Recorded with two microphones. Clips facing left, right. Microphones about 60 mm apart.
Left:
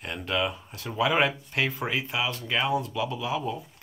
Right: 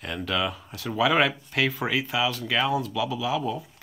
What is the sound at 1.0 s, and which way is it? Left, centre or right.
Speech, right.